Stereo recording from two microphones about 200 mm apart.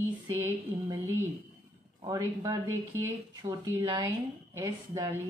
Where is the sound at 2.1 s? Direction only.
15° right (ahead or behind).